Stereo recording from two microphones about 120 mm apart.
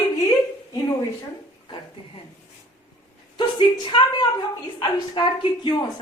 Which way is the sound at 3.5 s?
40° left (ahead or behind).